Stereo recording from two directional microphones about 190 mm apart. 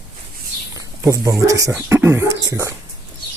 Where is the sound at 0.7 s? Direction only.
20° right (ahead or behind).